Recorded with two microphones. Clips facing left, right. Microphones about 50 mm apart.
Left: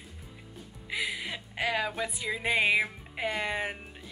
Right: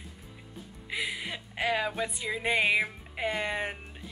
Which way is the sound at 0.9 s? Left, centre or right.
Centre.